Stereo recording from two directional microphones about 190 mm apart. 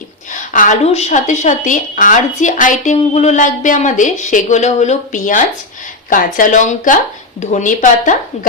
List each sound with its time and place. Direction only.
0.3 s a woman's voice: 40° left (ahead or behind)